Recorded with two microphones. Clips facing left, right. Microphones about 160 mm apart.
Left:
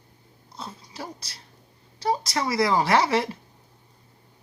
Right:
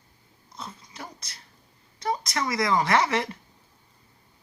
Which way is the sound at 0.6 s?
30° left (ahead or behind).